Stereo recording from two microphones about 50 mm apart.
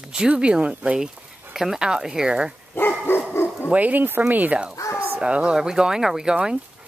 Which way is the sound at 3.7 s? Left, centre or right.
Right.